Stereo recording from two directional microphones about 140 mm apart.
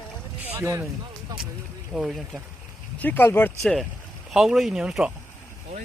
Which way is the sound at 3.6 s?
5° left (ahead or behind).